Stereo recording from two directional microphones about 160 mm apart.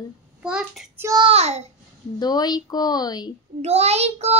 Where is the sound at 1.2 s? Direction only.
40° right (ahead or behind).